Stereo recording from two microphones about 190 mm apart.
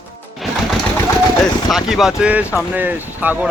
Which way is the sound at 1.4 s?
Centre (ahead or behind).